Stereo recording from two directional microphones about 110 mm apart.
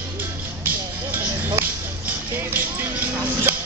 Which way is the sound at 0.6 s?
20° right (ahead or behind).